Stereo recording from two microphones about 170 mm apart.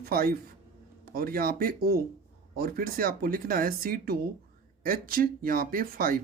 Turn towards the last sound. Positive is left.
turn(degrees=-55)  # may be behind; listen again after turning